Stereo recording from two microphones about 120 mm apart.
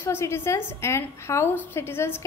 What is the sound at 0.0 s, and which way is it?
A woman's voice, 20° left (ahead or behind).